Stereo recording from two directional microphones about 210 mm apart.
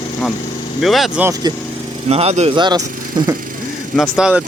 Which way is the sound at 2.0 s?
30° right (ahead or behind).